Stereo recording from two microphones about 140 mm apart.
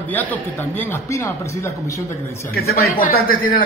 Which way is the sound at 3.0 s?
90° left.